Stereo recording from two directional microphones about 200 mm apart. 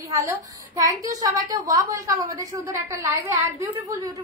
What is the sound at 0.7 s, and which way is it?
A woman's voice, 15° right (ahead or behind).